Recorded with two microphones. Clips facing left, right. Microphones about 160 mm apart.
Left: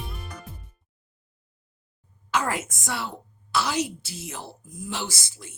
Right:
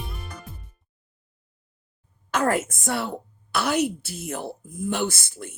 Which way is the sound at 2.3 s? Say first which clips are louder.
Right 4 dB; 50° right (ahead or behind).